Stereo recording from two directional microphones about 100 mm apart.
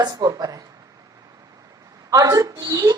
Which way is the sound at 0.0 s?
40° right (ahead or behind).